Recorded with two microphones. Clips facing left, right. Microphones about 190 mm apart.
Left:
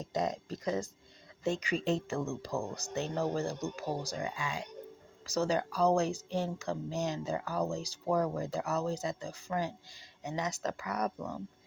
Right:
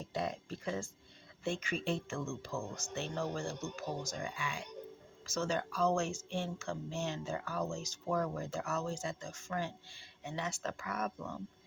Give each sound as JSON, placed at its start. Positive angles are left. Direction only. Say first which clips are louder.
{"t": 0.0, "sound": "speech", "louder": "left 4 dB", "side_deg": 40}